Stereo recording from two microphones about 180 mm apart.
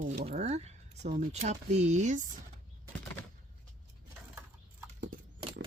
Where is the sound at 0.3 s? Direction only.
40° right (ahead or behind).